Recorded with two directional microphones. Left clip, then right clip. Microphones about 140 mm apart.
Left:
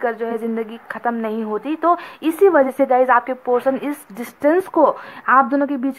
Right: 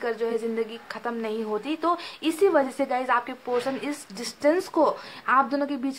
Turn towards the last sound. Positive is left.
turn(degrees=25)  # may be behind; listen again after turning